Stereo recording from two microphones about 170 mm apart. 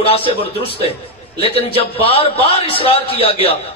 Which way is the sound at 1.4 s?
35° left (ahead or behind).